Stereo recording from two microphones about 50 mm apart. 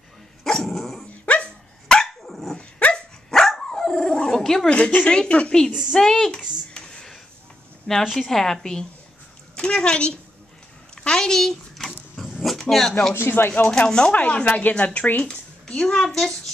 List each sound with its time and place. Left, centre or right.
0.4 s dog: centre
1.2 s dog: left
2.2 s dog: centre
2.5 s dog: centre
4.6 s a woman's voice: left
6.7 s a sound: centre
7.9 s a woman's voice: centre
11.1 s dog: centre
12.4 s speech: centre
13.1 s speech: left
13.8 s a woman's voice: centre
14.1 s speech: left
15.6 s a woman's voice: centre